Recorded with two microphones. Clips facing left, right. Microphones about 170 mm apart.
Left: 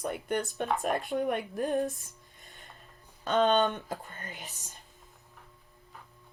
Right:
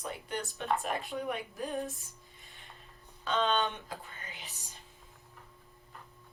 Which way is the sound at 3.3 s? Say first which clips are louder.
Left 6 dB; 50° left (ahead or behind).